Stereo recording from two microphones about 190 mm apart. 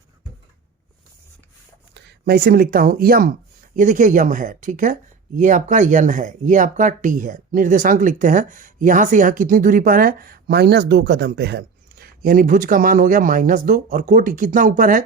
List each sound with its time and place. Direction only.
1.9 s speech: 60° right (ahead or behind)